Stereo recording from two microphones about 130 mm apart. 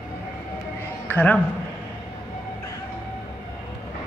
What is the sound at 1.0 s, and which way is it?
Speech, 10° left (ahead or behind).